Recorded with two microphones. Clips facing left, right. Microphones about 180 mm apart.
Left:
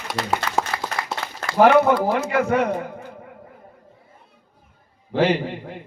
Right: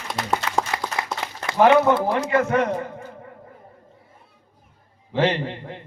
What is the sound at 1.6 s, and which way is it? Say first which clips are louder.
A man's voice: left 1 dB; centre (ahead or behind).